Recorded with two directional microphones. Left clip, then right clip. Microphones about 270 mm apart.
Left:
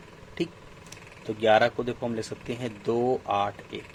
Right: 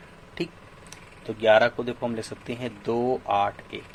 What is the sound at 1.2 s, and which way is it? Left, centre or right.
Speech, centre.